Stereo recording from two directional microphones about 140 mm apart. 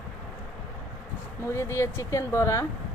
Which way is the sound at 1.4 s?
20° left (ahead or behind).